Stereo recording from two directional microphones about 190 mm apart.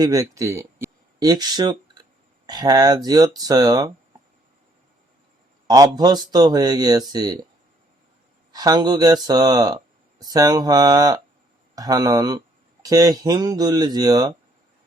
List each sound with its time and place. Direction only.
0.0 s speech: 20° right (ahead or behind)
5.6 s speech: 20° right (ahead or behind)
8.5 s speech: 20° right (ahead or behind)